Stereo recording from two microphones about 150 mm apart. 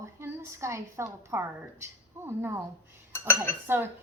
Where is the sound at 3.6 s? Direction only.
15° right (ahead or behind).